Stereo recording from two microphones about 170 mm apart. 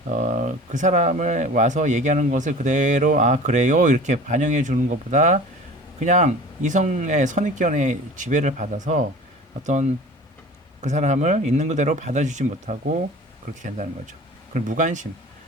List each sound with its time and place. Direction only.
0.1 s speech: 45° right (ahead or behind)
14.7 s speech: 50° right (ahead or behind)